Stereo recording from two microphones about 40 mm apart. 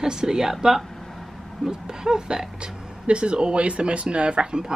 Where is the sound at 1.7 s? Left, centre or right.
Centre.